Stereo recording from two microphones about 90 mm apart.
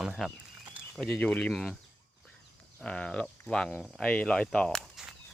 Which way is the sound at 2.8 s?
10° left (ahead or behind).